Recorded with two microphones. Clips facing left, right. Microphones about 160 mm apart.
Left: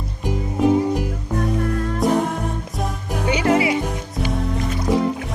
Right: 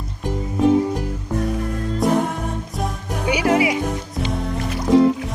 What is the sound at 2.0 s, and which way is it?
Music, centre (ahead or behind).